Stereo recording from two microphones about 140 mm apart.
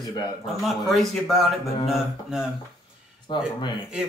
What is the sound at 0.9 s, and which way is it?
Speech, centre (ahead or behind).